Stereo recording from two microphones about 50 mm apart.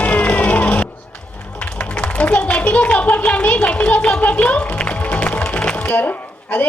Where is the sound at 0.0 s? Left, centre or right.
Left.